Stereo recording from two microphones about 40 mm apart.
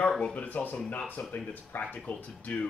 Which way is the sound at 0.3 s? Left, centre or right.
Left.